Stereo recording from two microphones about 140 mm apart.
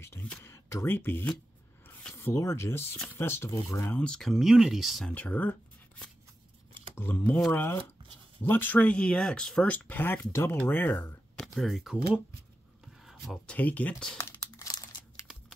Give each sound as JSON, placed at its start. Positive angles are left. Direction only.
{"t": 0.0, "sound": "speech", "side_deg": 15}
{"t": 3.9, "sound": "speech", "side_deg": 5}
{"t": 5.1, "sound": "speech", "side_deg": 10}
{"t": 11.3, "sound": "speech", "side_deg": 0}
{"t": 13.0, "sound": "a sound", "side_deg": -5}
{"t": 13.5, "sound": "speech", "side_deg": 10}
{"t": 14.1, "sound": "crumpling", "side_deg": 20}